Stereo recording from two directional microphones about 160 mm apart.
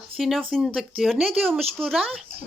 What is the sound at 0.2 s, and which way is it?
Speech, centre (ahead or behind).